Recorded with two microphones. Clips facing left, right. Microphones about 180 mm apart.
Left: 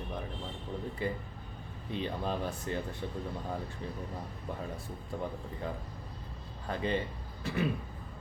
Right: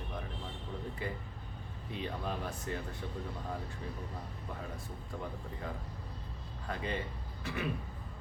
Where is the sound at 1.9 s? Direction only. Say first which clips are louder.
Left 4 dB; 30° left (ahead or behind).